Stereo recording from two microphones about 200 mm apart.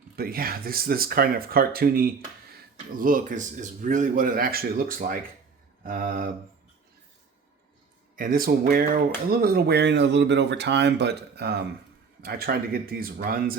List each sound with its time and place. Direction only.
0.2 s speech: 50° right (ahead or behind)
8.1 s speech: 45° right (ahead or behind)